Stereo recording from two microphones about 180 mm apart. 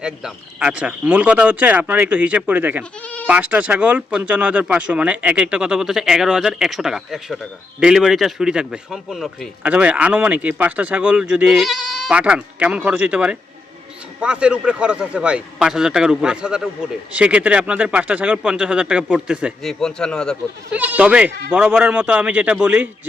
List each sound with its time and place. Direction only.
0.0 s a man's voice: 5° right (ahead or behind)
3.0 s bleat: 5° left (ahead or behind)
3.2 s a man's voice: 10° right (ahead or behind)
20.7 s a man's voice: 10° right (ahead or behind)